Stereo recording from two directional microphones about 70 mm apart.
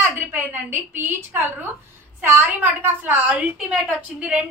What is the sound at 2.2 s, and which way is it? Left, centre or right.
A woman's voice, right.